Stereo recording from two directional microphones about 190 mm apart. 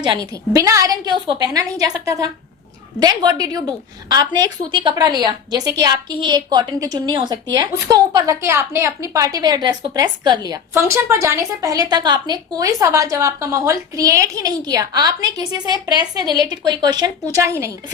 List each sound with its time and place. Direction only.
0.0 s a woman's voice: 20° right (ahead or behind)